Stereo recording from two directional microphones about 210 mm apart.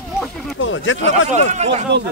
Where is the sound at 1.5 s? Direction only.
35° right (ahead or behind).